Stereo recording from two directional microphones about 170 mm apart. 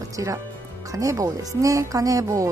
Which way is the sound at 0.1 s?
20° right (ahead or behind).